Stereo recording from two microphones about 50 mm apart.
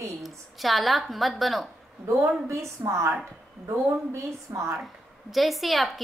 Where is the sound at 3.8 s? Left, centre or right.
Right.